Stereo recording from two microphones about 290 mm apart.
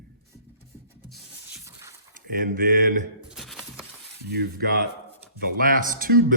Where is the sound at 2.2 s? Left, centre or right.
Right.